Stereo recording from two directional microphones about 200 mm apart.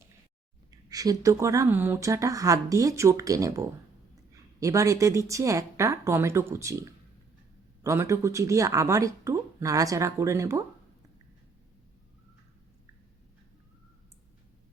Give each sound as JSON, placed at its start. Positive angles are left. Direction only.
{"t": 0.9, "sound": "speech", "side_deg": -20}
{"t": 7.9, "sound": "speech", "side_deg": -15}